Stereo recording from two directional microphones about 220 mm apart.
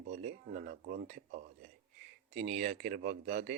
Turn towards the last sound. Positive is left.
turn(degrees=-35)  # may be behind; listen again after turning